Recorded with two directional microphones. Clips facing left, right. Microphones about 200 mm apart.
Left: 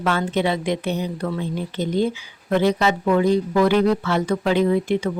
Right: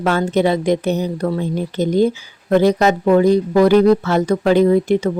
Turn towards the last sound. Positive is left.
turn(degrees=-40)  # may be behind; listen again after turning